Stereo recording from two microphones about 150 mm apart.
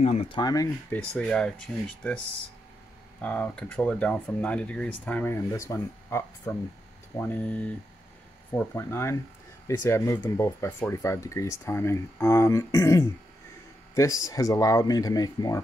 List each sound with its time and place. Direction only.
0.0 s speech: 45° left (ahead or behind)
0.4 s speech: 25° left (ahead or behind)
0.8 s speech: 10° left (ahead or behind)
3.2 s speech: 10° left (ahead or behind); by 15.6 s 25° left (ahead or behind)